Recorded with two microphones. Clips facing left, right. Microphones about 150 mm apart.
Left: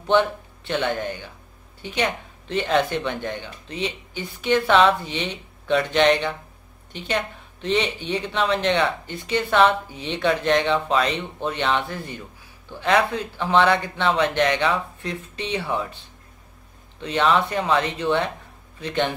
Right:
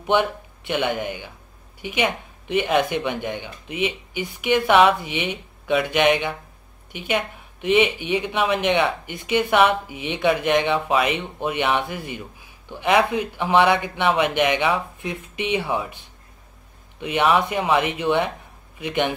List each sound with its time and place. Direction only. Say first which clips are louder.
0.0 s speech: left 1 dB; 15° right (ahead or behind)